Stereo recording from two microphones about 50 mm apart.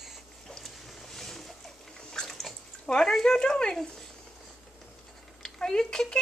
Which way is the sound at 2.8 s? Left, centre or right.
Centre.